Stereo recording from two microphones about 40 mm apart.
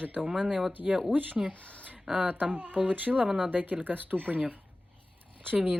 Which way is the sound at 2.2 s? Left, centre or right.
Right.